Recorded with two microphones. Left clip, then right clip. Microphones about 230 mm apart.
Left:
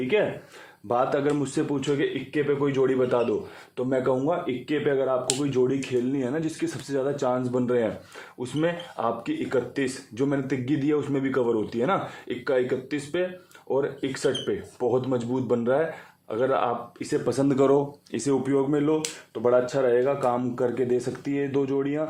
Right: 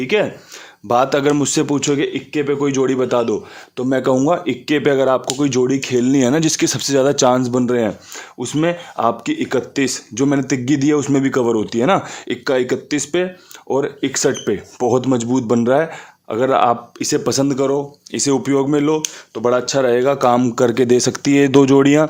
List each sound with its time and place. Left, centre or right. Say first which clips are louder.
0.9 s speech: right 9 dB; right
17.5 s speech: right 3 dB; centre
18.1 s speech: right 8 dB; right